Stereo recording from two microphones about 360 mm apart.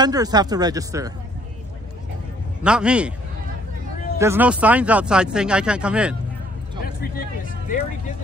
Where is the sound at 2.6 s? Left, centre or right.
Centre.